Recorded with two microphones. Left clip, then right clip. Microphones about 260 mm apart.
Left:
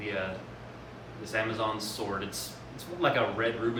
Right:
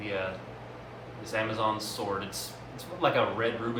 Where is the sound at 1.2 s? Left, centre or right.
Centre.